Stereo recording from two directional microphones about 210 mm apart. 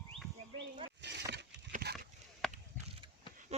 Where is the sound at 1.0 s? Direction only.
55° right (ahead or behind).